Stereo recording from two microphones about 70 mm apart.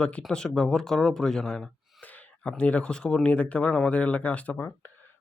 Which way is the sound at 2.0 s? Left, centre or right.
Centre.